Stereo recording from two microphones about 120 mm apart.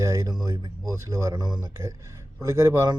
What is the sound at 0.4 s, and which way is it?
Speech, 35° right (ahead or behind).